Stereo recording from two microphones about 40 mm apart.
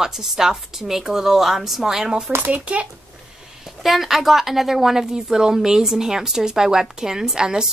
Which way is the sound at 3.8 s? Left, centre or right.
Centre.